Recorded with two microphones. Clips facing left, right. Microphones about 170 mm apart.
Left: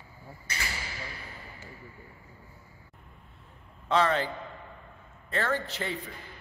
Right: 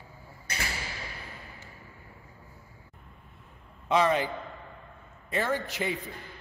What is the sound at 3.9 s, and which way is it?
Speech, 15° right (ahead or behind).